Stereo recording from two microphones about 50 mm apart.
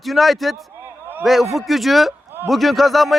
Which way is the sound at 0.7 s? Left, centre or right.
Right.